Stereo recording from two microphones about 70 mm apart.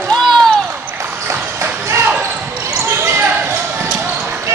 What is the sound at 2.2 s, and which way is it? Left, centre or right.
Basketball bounce, right.